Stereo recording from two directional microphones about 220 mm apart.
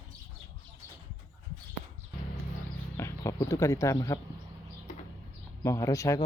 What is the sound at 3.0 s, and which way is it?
Speech, 10° left (ahead or behind).